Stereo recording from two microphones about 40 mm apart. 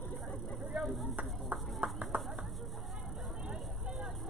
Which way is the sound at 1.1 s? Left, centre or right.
Right.